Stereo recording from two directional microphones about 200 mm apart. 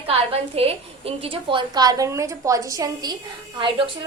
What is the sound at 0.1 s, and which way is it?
A woman's voice, 30° right (ahead or behind).